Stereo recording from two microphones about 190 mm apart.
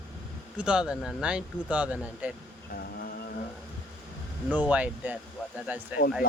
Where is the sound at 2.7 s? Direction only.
50° left (ahead or behind).